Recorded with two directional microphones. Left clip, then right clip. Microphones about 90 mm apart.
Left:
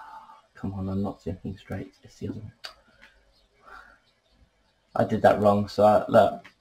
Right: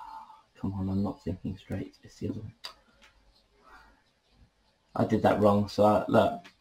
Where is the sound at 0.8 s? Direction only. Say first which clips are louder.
Left 2 dB; 35° left (ahead or behind).